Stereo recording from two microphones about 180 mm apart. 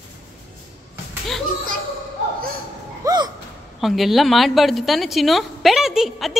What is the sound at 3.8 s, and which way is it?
A woman's voice, centre (ahead or behind).